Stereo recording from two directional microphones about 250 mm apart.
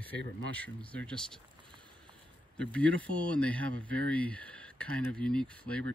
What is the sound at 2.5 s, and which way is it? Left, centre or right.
Speech, centre.